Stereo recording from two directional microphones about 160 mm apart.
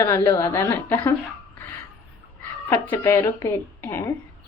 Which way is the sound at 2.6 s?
15° left (ahead or behind).